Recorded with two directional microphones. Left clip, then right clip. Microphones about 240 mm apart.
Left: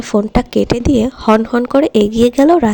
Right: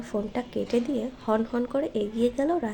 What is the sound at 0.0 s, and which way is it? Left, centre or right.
Speech, left.